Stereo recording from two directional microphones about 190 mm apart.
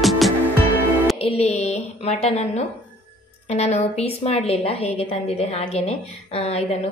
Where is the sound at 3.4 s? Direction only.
35° left (ahead or behind).